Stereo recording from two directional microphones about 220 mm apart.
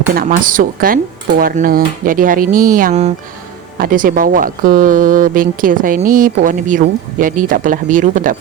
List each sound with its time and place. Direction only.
0.1 s speech: 40° right (ahead or behind)